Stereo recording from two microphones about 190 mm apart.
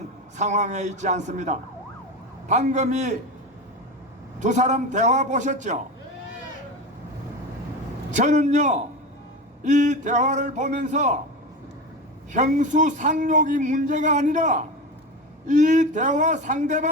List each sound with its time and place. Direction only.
0.3 s a man's voice: 40° right (ahead or behind)
4.4 s a man's voice: 40° right (ahead or behind)
8.1 s a man's voice: 40° right (ahead or behind)
12.3 s a man's voice: 40° right (ahead or behind)